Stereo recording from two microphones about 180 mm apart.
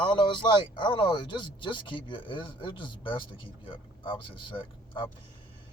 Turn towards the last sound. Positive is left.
turn(degrees=25)  # may be behind; listen again after turning